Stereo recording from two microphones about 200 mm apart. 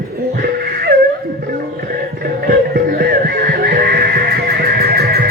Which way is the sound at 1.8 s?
50° right (ahead or behind).